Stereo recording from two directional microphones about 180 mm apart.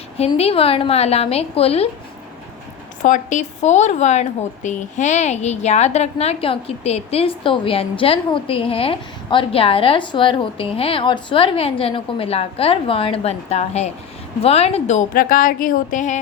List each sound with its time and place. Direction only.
0.3 s speech: 35° left (ahead or behind)
3.0 s a woman's voice: 45° left (ahead or behind)